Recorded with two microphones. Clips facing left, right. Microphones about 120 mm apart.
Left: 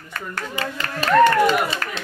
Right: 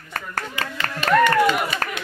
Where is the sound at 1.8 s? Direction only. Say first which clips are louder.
Right 2 dB; 40° right (ahead or behind).